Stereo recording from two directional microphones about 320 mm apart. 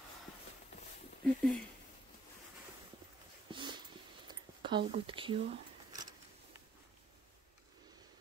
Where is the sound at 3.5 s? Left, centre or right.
Centre.